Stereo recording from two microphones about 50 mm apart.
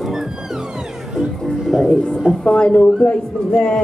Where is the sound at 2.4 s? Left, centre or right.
Centre.